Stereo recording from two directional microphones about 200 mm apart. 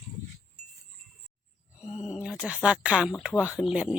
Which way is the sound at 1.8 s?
30° left (ahead or behind).